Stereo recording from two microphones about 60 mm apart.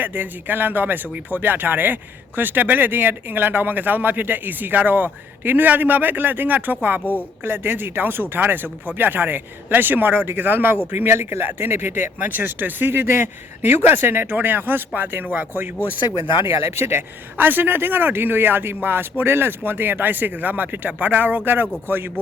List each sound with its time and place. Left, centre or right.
0.0 s speech: right
7.0 s speech: left
7.4 s speech: right
16.7 s speech: right
17.3 s speech: right